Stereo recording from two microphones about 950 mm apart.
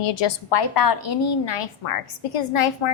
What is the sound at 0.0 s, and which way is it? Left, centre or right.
A woman's voice, left.